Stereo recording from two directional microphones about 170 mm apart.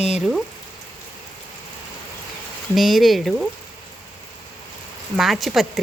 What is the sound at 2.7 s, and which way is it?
Speech, centre (ahead or behind).